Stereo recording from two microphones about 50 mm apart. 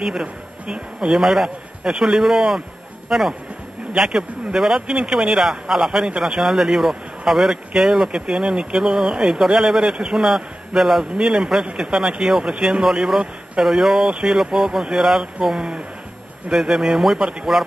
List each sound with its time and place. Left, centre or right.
0.2 s speech: centre
1.1 s speech: centre
4.8 s speech: centre
17.2 s speech: centre